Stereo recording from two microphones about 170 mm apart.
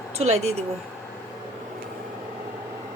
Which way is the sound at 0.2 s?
40° right (ahead or behind).